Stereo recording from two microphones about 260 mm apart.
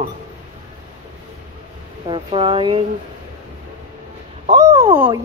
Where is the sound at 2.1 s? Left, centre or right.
Centre.